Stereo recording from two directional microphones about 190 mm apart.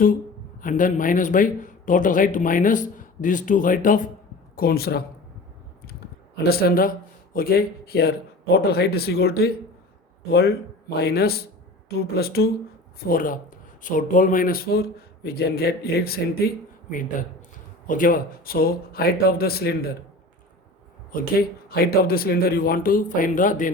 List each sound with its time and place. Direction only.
0.6 s speech: 45° left (ahead or behind)
6.3 s speech: 55° left (ahead or behind)
21.1 s speech: 50° left (ahead or behind)